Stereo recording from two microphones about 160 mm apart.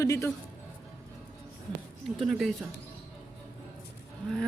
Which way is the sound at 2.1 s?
Centre (ahead or behind).